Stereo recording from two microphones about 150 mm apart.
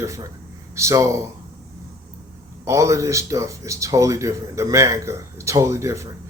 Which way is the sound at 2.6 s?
20° right (ahead or behind).